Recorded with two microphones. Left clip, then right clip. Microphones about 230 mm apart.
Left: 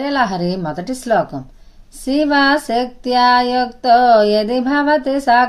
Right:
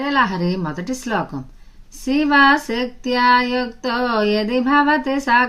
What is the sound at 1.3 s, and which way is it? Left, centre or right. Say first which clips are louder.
Speech: left 3 dB; right.